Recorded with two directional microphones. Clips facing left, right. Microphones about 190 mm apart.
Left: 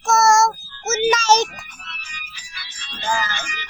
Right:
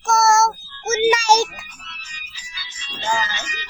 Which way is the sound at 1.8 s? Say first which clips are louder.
Left 3 dB; 60° left (ahead or behind).